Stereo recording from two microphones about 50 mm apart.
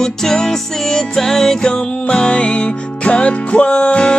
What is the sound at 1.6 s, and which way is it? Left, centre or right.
Music, left.